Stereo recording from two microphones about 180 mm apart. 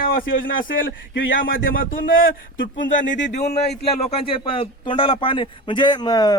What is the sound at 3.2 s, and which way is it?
A man's voice, 40° left (ahead or behind).